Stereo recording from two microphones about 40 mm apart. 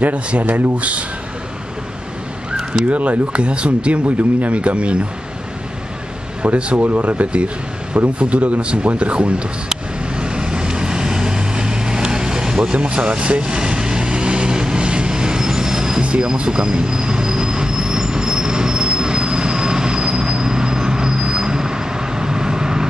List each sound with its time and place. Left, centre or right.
0.0 s speech: right
2.9 s speech: right
6.4 s speech: right
10.1 s vehicle: right
12.7 s vehicle: right
16.0 s train: right